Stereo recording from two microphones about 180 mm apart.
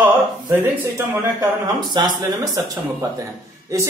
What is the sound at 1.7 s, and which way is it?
Speech, 25° right (ahead or behind).